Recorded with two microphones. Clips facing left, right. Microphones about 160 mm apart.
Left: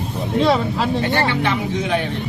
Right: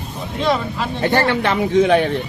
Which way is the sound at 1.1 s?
55° right (ahead or behind).